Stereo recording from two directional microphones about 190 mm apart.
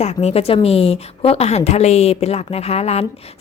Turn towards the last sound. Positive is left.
turn(degrees=35)  # may be behind; listen again after turning